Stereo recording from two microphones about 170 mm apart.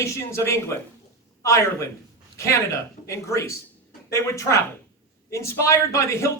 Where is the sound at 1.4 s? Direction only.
15° left (ahead or behind).